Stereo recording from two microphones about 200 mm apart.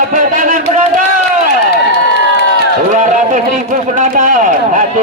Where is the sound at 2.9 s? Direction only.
40° right (ahead or behind).